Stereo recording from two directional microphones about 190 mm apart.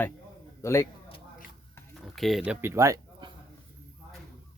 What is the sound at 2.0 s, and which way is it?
Speech, centre (ahead or behind).